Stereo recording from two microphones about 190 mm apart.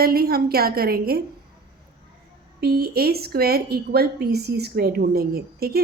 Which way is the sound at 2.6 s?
55° right (ahead or behind).